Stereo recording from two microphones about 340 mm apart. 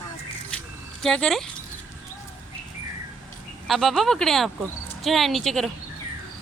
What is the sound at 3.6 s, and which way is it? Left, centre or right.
Speech, centre.